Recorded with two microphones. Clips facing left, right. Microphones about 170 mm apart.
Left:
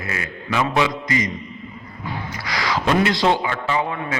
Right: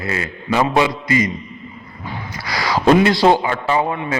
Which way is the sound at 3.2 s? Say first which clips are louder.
Right 5 dB; 35° right (ahead or behind).